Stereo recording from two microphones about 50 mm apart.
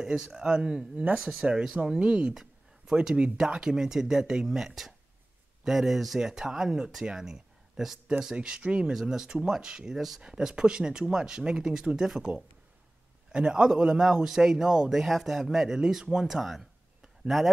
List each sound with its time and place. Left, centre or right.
0.0 s speech: centre
8.4 s speech: right; by 10.2 s centre
10.2 s speech: centre
13.3 s speech: centre